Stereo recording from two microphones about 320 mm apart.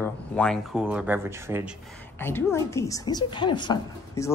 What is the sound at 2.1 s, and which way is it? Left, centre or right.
Speech, centre.